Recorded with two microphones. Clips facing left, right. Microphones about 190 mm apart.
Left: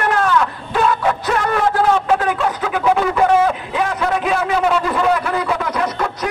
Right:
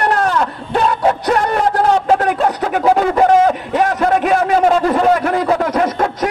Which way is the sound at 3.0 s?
45° right (ahead or behind).